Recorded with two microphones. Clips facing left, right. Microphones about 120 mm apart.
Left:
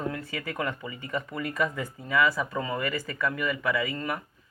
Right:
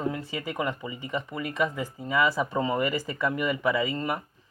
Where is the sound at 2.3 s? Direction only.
25° right (ahead or behind).